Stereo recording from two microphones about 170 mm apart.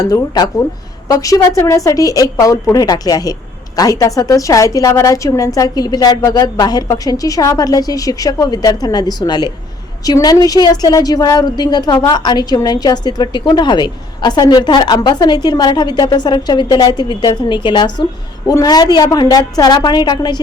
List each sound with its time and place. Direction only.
0.0 s a woman's voice: 25° left (ahead or behind)